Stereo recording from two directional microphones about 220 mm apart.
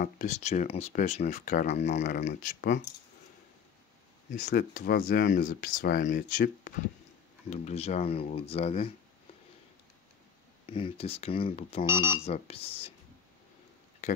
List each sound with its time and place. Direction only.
0.0 s speech: 35° left (ahead or behind)
4.3 s speech: 35° left (ahead or behind)
10.7 s speech: 25° left (ahead or behind)
11.9 s speech: 15° right (ahead or behind)
12.3 s speech: 25° left (ahead or behind)
14.0 s a sound: 30° left (ahead or behind)